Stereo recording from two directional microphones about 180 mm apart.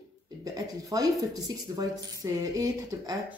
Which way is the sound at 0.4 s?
20° right (ahead or behind).